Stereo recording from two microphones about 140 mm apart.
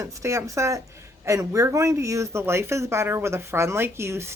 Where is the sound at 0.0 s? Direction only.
20° right (ahead or behind).